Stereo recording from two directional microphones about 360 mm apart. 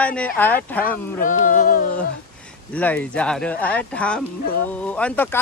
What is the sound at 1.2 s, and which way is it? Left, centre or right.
Music, left.